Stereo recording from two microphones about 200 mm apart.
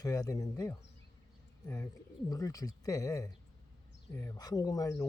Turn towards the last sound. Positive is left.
turn(degrees=15)  # may be behind; listen again after turning